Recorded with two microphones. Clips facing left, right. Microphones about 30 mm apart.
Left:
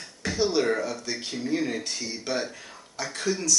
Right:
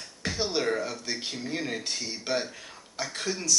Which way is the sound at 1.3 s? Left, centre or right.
Centre.